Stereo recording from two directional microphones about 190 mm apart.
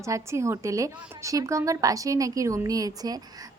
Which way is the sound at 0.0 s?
15° right (ahead or behind).